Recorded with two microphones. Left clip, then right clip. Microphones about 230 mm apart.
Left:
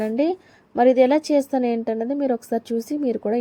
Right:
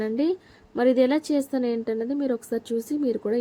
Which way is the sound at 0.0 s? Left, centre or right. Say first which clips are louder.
Left 3 dB; centre.